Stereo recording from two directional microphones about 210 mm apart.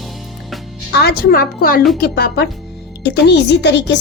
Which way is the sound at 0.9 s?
50° left (ahead or behind).